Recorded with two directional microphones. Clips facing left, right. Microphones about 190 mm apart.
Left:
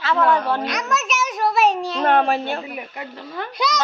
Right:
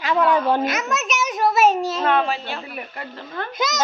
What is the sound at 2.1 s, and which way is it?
Speech, 45° left (ahead or behind).